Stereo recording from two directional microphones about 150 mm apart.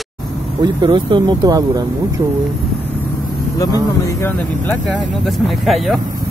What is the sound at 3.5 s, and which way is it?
Speech, 20° left (ahead or behind).